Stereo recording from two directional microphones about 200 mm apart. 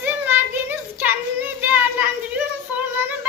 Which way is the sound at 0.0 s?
10° right (ahead or behind).